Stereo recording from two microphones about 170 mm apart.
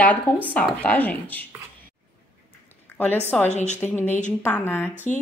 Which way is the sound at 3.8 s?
10° left (ahead or behind).